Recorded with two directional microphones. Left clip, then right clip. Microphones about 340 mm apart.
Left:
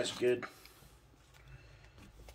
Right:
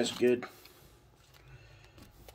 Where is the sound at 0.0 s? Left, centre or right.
Right.